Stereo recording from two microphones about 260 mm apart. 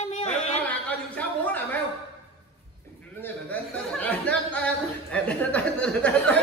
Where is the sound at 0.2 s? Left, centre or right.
Left.